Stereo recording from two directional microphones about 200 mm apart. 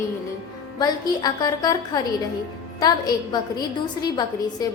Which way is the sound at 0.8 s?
20° left (ahead or behind).